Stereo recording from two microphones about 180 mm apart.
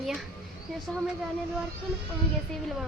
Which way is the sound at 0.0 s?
Centre (ahead or behind).